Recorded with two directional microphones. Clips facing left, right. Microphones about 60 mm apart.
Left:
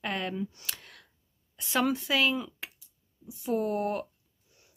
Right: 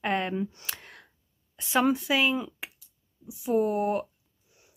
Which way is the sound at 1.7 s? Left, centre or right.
Centre.